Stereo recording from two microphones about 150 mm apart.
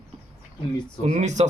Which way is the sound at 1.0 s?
45° right (ahead or behind).